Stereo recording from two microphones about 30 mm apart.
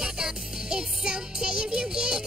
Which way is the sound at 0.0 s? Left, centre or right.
Right.